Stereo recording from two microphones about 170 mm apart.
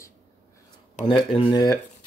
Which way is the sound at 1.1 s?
35° left (ahead or behind).